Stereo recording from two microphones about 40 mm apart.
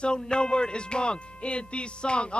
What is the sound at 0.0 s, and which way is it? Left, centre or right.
Music, left.